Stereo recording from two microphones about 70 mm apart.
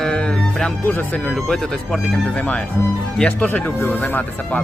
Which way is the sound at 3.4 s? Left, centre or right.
Left.